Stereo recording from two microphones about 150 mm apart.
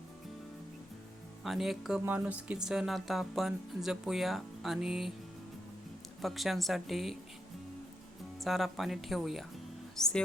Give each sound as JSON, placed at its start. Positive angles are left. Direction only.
{"t": 1.5, "sound": "speech", "side_deg": 0}
{"t": 6.2, "sound": "speech", "side_deg": 0}
{"t": 8.4, "sound": "speech", "side_deg": 0}